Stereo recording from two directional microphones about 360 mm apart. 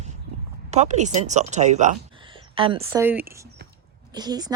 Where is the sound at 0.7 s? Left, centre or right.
Centre.